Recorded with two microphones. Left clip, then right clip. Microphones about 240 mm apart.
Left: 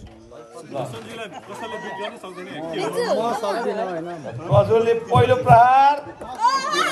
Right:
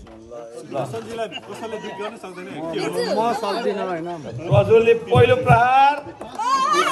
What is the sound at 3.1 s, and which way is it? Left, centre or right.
A man's voice, centre.